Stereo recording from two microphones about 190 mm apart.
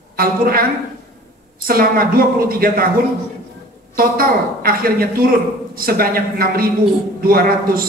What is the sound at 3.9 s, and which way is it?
A man's voice, 50° right (ahead or behind).